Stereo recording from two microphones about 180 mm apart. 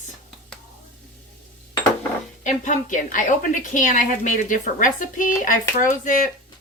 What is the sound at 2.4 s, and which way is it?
A woman's voice, 45° left (ahead or behind).